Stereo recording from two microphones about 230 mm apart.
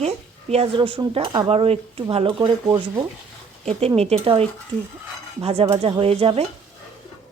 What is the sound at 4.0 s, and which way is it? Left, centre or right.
A woman's voice, right.